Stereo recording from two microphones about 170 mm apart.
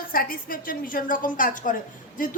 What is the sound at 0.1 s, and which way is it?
A woman's voice, 55° left (ahead or behind).